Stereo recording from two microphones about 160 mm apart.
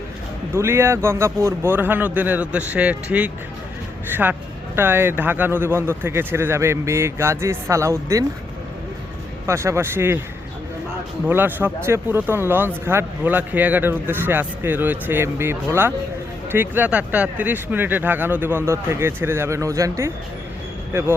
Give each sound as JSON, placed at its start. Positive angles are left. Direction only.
{"t": 0.5, "sound": "speech", "side_deg": -15}
{"t": 9.5, "sound": "speech", "side_deg": -15}
{"t": 11.3, "sound": "speech", "side_deg": -10}